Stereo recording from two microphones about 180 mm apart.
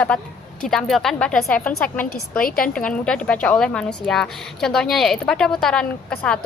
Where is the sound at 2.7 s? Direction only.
5° left (ahead or behind).